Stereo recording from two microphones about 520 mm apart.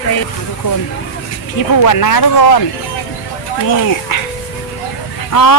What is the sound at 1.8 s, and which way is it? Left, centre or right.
Speech, left.